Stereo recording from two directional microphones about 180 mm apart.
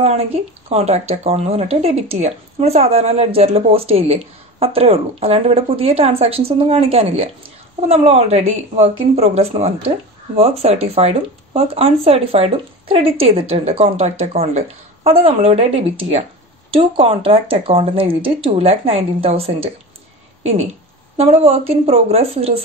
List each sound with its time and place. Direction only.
0.0 s speech: 35° right (ahead or behind)
21.2 s speech: 35° right (ahead or behind)